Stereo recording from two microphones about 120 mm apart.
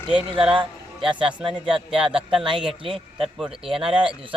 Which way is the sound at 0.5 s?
45° right (ahead or behind).